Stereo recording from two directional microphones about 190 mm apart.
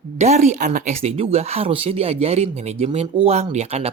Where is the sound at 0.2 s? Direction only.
35° right (ahead or behind).